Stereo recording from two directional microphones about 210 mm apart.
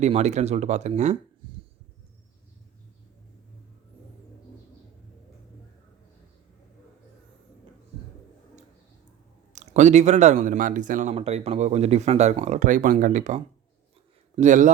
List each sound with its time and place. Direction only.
0.0 s speech: 35° right (ahead or behind)
9.5 s speech: 35° right (ahead or behind)